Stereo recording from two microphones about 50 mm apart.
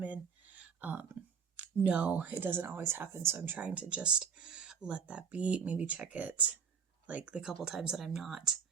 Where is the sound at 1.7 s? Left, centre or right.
Right.